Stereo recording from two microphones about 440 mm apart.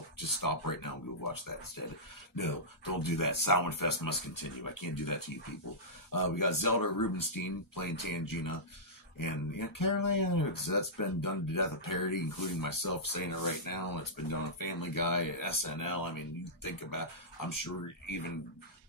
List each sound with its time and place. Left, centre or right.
0.4 s speech: left